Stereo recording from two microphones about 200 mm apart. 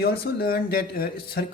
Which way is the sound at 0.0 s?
50° left (ahead or behind).